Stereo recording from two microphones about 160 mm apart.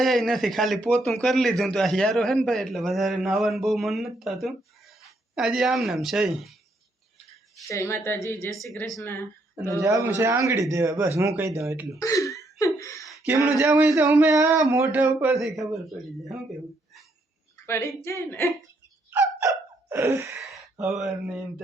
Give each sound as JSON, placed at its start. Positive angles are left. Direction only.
{"t": 0.0, "sound": "a man's voice", "side_deg": 0}
{"t": 7.7, "sound": "a woman's voice", "side_deg": 20}
{"t": 8.7, "sound": "a man's voice", "side_deg": 0}
{"t": 9.8, "sound": "a man's voice", "side_deg": -20}
{"t": 11.9, "sound": "laughter", "side_deg": 20}
{"t": 13.2, "sound": "a man's voice", "side_deg": -15}
{"t": 17.7, "sound": "a woman's voice", "side_deg": 15}
{"t": 19.9, "sound": "a man's voice", "side_deg": -15}
{"t": 20.4, "sound": "speech", "side_deg": 0}